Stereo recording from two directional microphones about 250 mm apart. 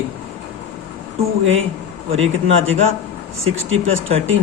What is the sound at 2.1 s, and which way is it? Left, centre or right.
Speech, right.